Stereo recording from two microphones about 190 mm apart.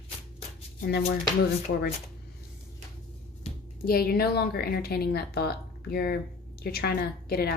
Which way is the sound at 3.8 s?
50° left (ahead or behind).